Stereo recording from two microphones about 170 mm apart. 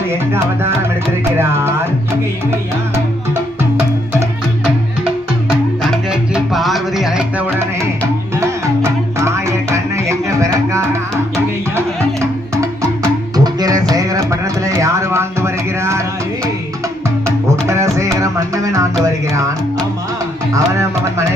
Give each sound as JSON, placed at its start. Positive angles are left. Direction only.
{"t": 0.3, "sound": "music", "side_deg": -15}
{"t": 5.8, "sound": "music", "side_deg": 0}
{"t": 13.3, "sound": "music", "side_deg": -20}
{"t": 13.9, "sound": "a sound", "side_deg": -20}
{"t": 17.2, "sound": "music", "side_deg": -15}
{"t": 20.5, "sound": "music", "side_deg": -20}